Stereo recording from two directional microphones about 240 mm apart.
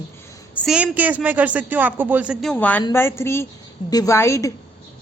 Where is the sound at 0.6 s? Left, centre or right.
Centre.